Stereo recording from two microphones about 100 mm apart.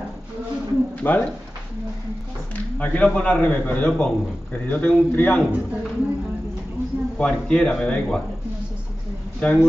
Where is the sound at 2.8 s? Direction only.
15° left (ahead or behind).